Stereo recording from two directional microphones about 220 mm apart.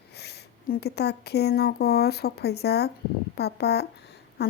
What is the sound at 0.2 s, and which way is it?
Speech, 45° left (ahead or behind).